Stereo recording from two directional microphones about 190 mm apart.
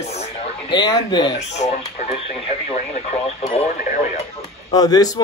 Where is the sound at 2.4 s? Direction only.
35° left (ahead or behind).